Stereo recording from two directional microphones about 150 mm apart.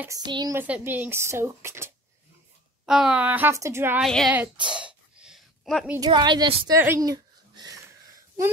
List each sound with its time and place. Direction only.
0.2 s speech: 30° right (ahead or behind)
0.6 s speech: 10° right (ahead or behind)
2.9 s speech: 5° right (ahead or behind)
4.0 s speech: centre (ahead or behind)
4.7 s sneeze: 5° right (ahead or behind)
5.9 s speech: 30° right (ahead or behind)
6.7 s speech: 15° right (ahead or behind)
7.1 s a sound: 25° right (ahead or behind)